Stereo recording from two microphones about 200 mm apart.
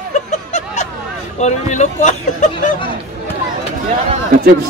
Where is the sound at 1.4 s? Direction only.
35° left (ahead or behind).